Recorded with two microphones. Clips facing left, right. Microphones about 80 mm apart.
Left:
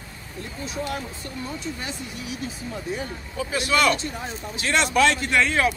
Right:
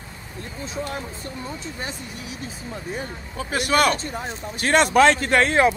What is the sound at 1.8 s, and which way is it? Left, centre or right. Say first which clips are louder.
Speech: right 1 dB; right.